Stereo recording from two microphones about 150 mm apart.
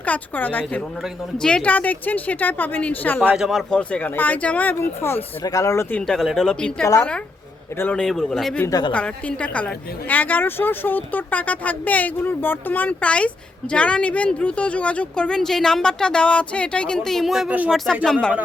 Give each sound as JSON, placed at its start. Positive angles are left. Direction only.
{"t": 0.0, "sound": "speech", "side_deg": 10}
{"t": 3.2, "sound": "speech", "side_deg": -5}
{"t": 6.1, "sound": "speech", "side_deg": 0}
{"t": 8.6, "sound": "a woman's voice", "side_deg": 25}
{"t": 8.9, "sound": "speech", "side_deg": 10}